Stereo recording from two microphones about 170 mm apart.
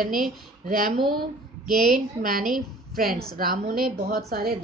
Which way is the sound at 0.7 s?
55° right (ahead or behind).